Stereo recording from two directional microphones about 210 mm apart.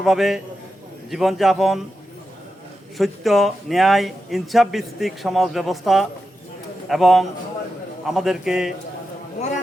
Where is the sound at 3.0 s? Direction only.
Centre (ahead or behind).